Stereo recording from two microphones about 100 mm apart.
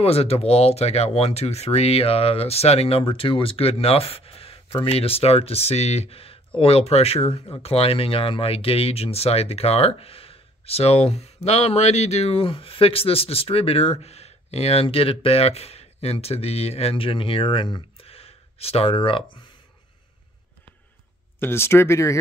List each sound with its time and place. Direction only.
0.0 s speech: 80° left; by 17.8 s 50° left (ahead or behind)
18.0 s a sound: 80° left; by 19.4 s 60° left (ahead or behind)
21.4 s speech: 25° left (ahead or behind)